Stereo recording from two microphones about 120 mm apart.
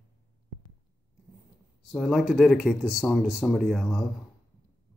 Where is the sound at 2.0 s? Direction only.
Centre (ahead or behind).